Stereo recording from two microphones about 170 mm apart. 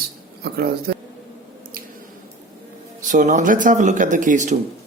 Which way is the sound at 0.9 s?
70° right (ahead or behind).